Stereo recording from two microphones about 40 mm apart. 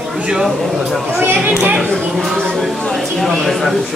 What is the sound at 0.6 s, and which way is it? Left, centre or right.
Speech, centre.